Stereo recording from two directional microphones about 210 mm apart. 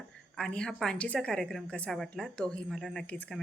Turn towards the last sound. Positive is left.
turn(degrees=5)  # may be behind; listen again after turning